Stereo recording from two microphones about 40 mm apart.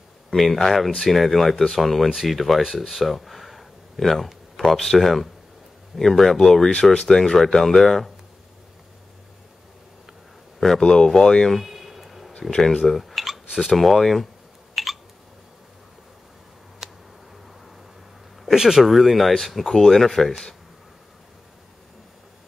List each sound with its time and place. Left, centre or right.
0.3 s speech: centre
6.7 s speech: left; by 8.1 s centre
10.8 s speech: centre
11.5 s a sound: centre
12.4 s speech: centre
12.8 s a sound: centre
13.7 s speech: centre
14.8 s a sound: centre
16.8 s tick: centre
18.4 s speech: centre